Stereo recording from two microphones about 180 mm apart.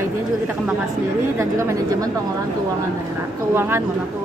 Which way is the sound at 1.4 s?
15° right (ahead or behind).